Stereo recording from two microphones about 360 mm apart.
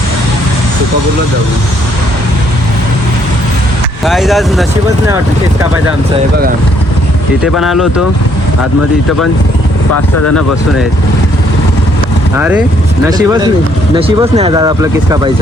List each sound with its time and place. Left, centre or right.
4.0 s speech: centre
7.4 s speech: centre
9.9 s speech: left
12.4 s speech: centre